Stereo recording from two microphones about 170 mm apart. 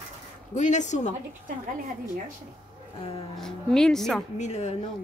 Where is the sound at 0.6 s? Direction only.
45° left (ahead or behind).